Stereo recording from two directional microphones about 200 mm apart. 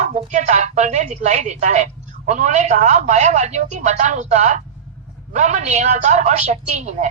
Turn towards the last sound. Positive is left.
turn(degrees=-35)  # may be behind; listen again after turning